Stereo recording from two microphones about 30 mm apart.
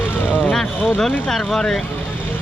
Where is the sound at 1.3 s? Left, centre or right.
Centre.